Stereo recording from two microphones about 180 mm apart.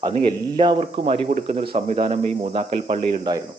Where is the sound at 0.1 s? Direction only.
30° right (ahead or behind).